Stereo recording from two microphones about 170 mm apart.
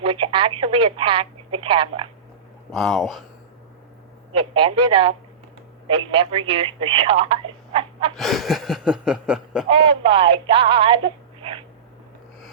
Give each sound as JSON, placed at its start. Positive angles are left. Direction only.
{"t": 0.0, "sound": "speech", "side_deg": -35}
{"t": 2.7, "sound": "snicker", "side_deg": 0}
{"t": 4.3, "sound": "speech", "side_deg": -35}
{"t": 8.1, "sound": "snicker", "side_deg": 0}
{"t": 9.6, "sound": "speech", "side_deg": -35}